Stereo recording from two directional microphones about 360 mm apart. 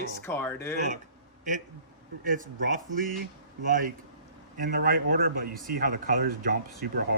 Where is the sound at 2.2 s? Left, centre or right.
Right.